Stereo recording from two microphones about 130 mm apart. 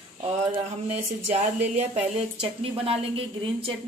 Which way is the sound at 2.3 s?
45° right (ahead or behind).